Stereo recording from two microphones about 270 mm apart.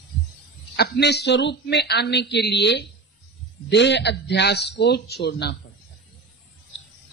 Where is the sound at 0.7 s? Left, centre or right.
Left.